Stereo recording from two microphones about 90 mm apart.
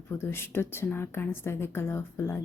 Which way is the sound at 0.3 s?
25° left (ahead or behind).